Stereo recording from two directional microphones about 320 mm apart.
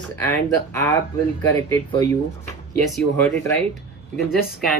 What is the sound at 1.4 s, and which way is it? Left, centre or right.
Speech, centre.